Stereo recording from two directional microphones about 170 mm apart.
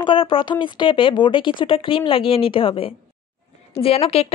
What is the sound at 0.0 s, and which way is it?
Speech, 30° left (ahead or behind).